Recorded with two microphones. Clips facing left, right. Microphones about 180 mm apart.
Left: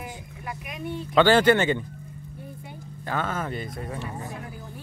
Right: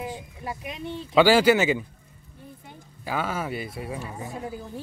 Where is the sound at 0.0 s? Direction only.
25° right (ahead or behind).